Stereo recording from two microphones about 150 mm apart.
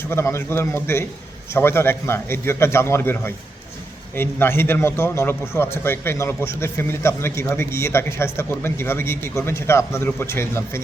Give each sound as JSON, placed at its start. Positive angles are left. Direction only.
{"t": 0.1, "sound": "a man's voice", "side_deg": 15}